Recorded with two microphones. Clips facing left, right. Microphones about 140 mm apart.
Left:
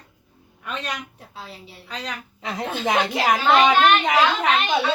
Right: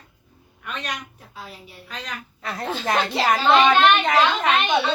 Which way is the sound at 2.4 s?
15° left (ahead or behind).